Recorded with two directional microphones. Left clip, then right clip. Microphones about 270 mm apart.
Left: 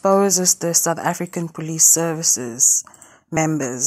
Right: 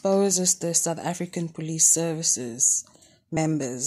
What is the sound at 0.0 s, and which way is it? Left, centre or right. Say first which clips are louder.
Speech: left 6 dB; centre.